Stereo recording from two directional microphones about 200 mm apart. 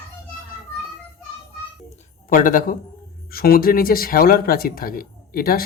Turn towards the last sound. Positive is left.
turn(degrees=50)  # may be behind; listen again after turning